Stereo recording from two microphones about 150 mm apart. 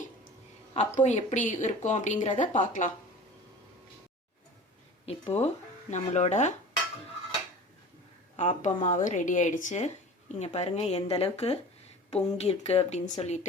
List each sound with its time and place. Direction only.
0.7 s a woman's voice: 50° left (ahead or behind)
5.0 s a woman's voice: 45° left (ahead or behind)
8.4 s a woman's voice: 55° left (ahead or behind)